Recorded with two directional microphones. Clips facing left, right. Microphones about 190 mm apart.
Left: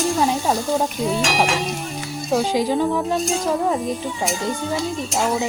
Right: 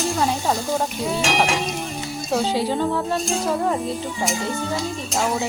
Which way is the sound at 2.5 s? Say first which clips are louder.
Left 2 dB; 10° left (ahead or behind).